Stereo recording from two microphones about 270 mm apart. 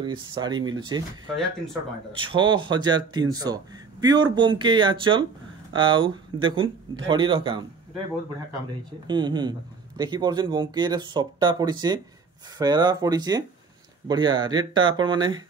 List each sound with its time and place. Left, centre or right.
0.0 s speech: centre
2.3 s speech: centre
9.0 s speech: centre